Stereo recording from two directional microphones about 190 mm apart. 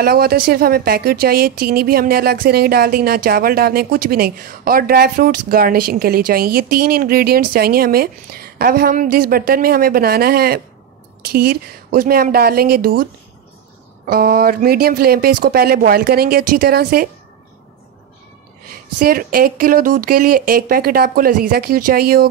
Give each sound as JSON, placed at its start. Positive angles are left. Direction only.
{"t": 0.0, "sound": "a woman's voice", "side_deg": -55}
{"t": 14.0, "sound": "a woman's voice", "side_deg": -50}
{"t": 18.7, "sound": "a woman's voice", "side_deg": -50}